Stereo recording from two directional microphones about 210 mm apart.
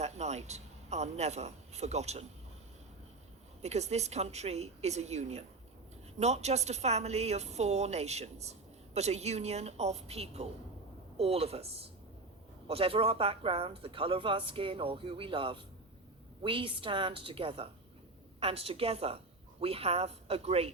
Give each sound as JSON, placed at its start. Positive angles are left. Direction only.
{"t": 0.0, "sound": "a man's voice", "side_deg": -30}
{"t": 3.6, "sound": "a woman's voice", "side_deg": -30}